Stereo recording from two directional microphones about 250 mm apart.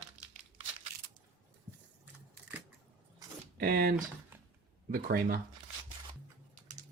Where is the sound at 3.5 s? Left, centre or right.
Right.